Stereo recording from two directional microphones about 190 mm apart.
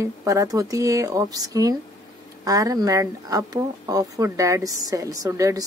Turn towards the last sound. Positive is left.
turn(degrees=-15)  # may be behind; listen again after turning